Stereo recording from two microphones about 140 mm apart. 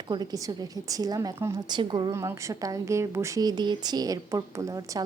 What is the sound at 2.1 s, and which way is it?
A woman's voice, 20° right (ahead or behind).